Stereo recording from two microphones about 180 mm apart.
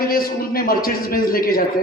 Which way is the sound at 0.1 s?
55° left (ahead or behind).